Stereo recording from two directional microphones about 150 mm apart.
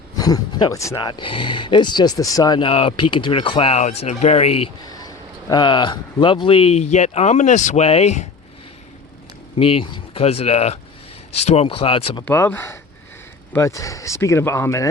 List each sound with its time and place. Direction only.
0.2 s speech: 25° left (ahead or behind)
0.9 s speech: 35° left (ahead or behind)
4.9 s speech: 25° left (ahead or behind); by 8.3 s 50° left (ahead or behind)
9.6 s speech: 40° left (ahead or behind)
12.2 s speech: 15° left (ahead or behind)